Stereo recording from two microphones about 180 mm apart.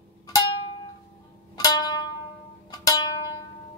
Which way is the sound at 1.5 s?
20° left (ahead or behind).